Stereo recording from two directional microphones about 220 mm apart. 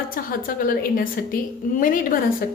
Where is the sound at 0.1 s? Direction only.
40° left (ahead or behind).